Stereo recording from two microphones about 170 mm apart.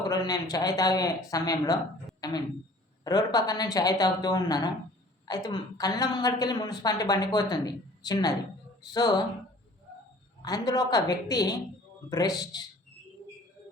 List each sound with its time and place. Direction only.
0.1 s a woman's voice: 20° left (ahead or behind)
3.0 s a woman's voice: 25° left (ahead or behind)
10.4 s a woman's voice: 20° left (ahead or behind)